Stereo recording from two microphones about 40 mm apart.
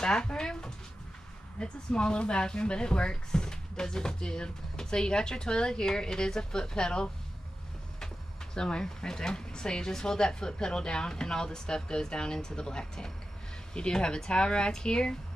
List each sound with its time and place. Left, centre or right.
0.0 s speech: left
8.5 s speech: centre